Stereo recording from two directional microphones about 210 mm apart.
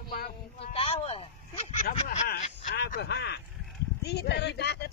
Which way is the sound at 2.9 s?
50° left (ahead or behind).